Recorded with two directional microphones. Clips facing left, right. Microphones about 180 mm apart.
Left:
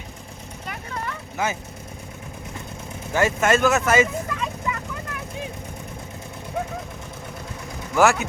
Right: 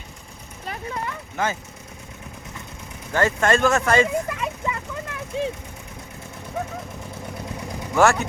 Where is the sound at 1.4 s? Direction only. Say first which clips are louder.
Right 1 dB; 5° left (ahead or behind).